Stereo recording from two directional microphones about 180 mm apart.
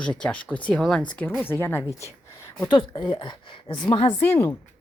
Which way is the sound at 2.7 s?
25° left (ahead or behind).